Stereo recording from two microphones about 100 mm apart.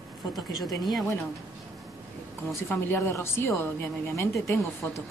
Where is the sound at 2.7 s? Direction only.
20° left (ahead or behind).